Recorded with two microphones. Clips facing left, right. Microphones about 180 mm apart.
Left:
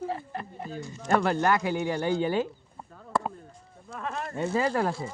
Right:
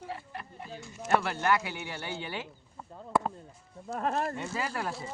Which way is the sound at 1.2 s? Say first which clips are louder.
Left 5 dB; 40° left (ahead or behind).